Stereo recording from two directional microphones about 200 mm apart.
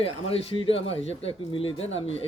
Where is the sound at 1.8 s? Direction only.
75° left (ahead or behind).